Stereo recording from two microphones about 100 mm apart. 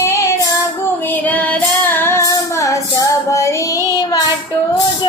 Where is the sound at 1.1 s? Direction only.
15° left (ahead or behind); by 3.8 s 30° left (ahead or behind).